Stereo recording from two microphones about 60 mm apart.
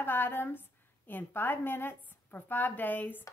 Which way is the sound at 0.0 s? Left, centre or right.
Left.